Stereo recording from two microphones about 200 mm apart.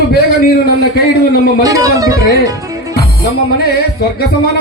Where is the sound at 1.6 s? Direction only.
15° right (ahead or behind).